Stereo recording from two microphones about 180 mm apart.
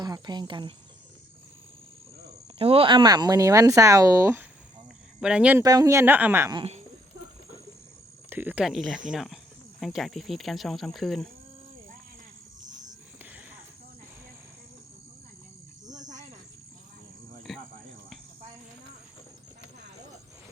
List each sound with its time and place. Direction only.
0.0 s cricket: 25° right (ahead or behind)
2.6 s speech: 30° right (ahead or behind); by 5.6 s 5° right (ahead or behind)
5.6 s speech: 20° right (ahead or behind)
6.6 s speech: 35° right (ahead or behind)
8.3 s speech: 10° right (ahead or behind)
15.9 s cricket: 40° right (ahead or behind)
17.5 s cricket: centre (ahead or behind)